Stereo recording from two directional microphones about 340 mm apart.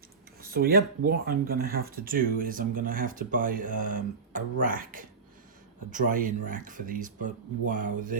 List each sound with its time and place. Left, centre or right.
0.5 s speech: right